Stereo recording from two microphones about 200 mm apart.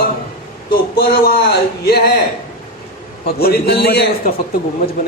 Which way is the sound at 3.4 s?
50° left (ahead or behind).